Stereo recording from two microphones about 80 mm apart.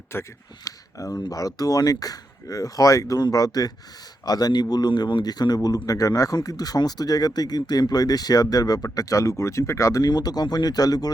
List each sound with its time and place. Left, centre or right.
0.1 s speech: left
0.6 s speech: left
10.0 s speech: left